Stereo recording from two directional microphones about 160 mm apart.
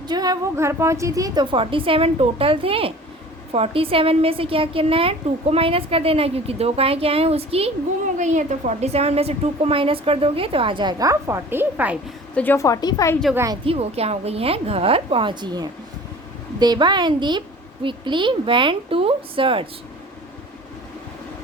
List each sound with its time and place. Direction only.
0.1 s a woman's voice: 25° right (ahead or behind)
8.2 s a woman's voice: 50° right (ahead or behind); by 11.9 s 10° right (ahead or behind)
12.3 s a woman's voice: 10° left (ahead or behind)
13.3 s a woman's voice: 20° right (ahead or behind)
13.7 s a woman's voice: 40° right (ahead or behind)